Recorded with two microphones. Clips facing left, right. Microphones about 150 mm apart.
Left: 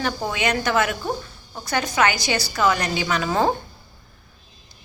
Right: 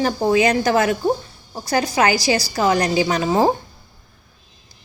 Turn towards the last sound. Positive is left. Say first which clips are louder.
# right 4 dB
turn(degrees=-30)  # may be behind; listen again after turning